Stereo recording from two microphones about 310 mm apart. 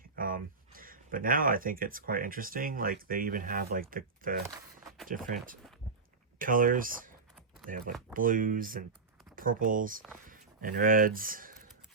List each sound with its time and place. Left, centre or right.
0.2 s speech: right
4.4 s walk: centre
5.0 s speech: right